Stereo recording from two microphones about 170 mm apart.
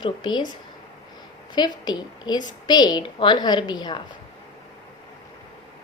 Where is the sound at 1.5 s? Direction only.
25° left (ahead or behind).